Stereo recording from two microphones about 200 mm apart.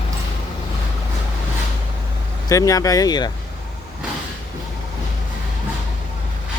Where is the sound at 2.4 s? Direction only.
15° left (ahead or behind).